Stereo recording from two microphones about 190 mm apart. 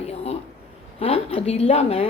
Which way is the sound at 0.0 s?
35° left (ahead or behind).